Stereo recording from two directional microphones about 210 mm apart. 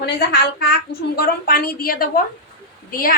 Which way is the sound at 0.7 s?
50° left (ahead or behind).